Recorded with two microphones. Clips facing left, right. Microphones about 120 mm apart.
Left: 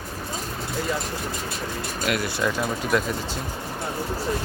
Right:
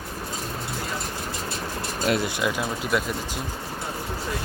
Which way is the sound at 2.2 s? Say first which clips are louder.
Left 1 dB; 15° right (ahead or behind).